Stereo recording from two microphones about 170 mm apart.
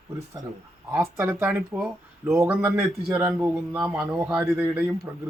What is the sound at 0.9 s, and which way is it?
Speech, 15° right (ahead or behind).